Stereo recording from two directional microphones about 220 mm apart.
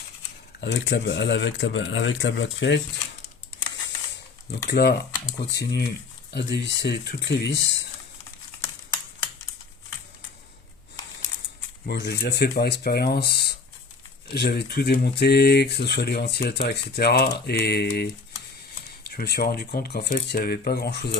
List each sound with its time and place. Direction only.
0.6 s speech: 50° left (ahead or behind)
4.7 s speech: 45° left (ahead or behind)
11.9 s speech: 50° left (ahead or behind)